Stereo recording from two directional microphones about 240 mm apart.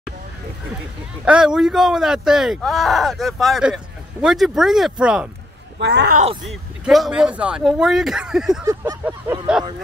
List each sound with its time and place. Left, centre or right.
1.2 s speech: centre
5.8 s speech: right
6.4 s speech: centre
8.6 s a sound: centre